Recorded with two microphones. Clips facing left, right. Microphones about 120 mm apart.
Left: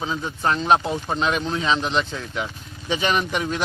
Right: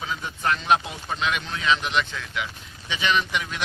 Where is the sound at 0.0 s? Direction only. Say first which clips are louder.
Left 4 dB; 30° left (ahead or behind).